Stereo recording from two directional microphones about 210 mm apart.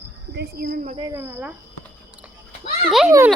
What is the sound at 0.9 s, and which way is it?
Speech, 15° right (ahead or behind).